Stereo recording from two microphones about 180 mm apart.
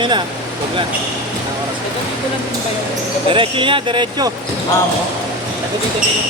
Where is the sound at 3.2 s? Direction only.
30° right (ahead or behind).